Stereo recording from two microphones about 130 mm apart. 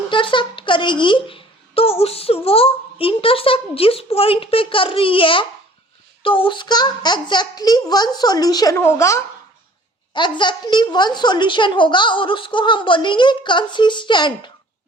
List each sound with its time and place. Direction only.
0.1 s a woman's voice: 40° left (ahead or behind)
8.7 s speech: 20° left (ahead or behind)
10.1 s speech: 35° left (ahead or behind)